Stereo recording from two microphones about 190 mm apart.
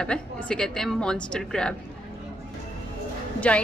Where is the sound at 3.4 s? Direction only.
5° left (ahead or behind).